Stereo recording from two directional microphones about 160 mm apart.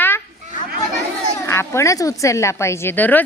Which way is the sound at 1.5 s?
15° left (ahead or behind).